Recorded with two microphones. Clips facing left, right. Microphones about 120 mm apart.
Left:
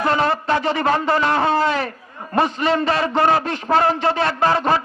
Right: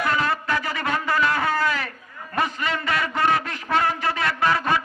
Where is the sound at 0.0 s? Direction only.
30° left (ahead or behind).